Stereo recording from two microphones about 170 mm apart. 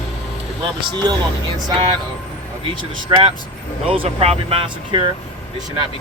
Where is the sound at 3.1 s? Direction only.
25° right (ahead or behind).